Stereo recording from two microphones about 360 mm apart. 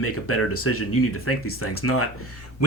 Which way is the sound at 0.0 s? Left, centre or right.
Left.